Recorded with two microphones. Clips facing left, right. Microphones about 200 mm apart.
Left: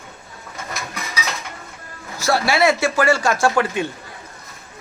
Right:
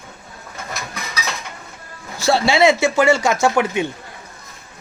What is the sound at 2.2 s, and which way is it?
Speech, 25° right (ahead or behind).